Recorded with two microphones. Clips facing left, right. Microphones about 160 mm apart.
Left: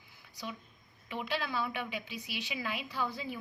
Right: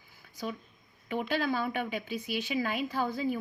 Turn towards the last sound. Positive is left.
turn(degrees=-45)  # may be behind; listen again after turning